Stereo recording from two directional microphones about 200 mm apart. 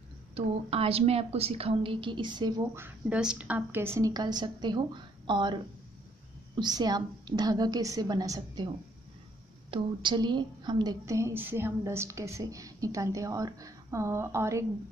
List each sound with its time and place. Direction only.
0.3 s a woman's voice: 30° right (ahead or behind)
6.6 s a woman's voice: 20° right (ahead or behind)
9.7 s a woman's voice: 25° right (ahead or behind)